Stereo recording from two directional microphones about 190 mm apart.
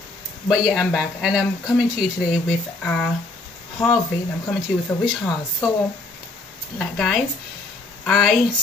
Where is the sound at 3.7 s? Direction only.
20° left (ahead or behind).